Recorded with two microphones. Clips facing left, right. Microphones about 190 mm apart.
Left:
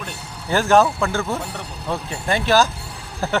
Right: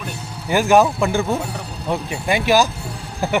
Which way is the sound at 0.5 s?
10° right (ahead or behind).